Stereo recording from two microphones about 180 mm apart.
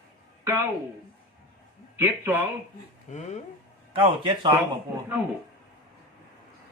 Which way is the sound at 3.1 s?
40° left (ahead or behind).